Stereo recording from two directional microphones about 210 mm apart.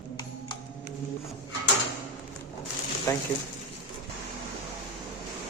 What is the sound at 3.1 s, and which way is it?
Speech, 15° left (ahead or behind).